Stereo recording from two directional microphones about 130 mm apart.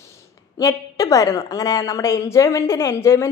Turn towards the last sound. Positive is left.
turn(degrees=20)  # may be behind; listen again after turning